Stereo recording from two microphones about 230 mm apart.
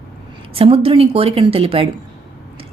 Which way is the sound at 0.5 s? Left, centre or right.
Right.